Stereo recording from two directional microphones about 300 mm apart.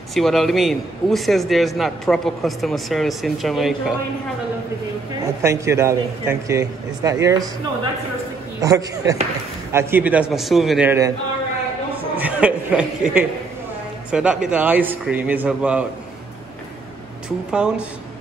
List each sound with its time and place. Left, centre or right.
0.1 s a man's voice: centre
5.2 s a man's voice: centre
8.5 s a man's voice: centre
12.2 s a man's voice: centre
17.5 s a man's voice: centre